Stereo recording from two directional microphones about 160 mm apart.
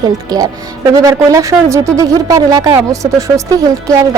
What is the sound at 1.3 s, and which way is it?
Speech, 20° right (ahead or behind).